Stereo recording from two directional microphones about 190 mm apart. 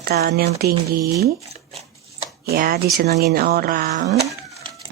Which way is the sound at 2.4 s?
50° right (ahead or behind).